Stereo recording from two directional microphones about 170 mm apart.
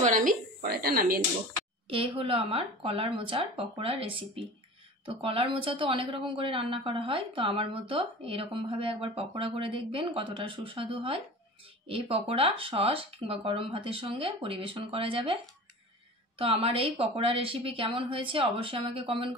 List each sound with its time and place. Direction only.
0.0 s a woman's voice: 50° right (ahead or behind)
1.9 s speech: 35° right (ahead or behind)
16.3 s speech: 35° right (ahead or behind)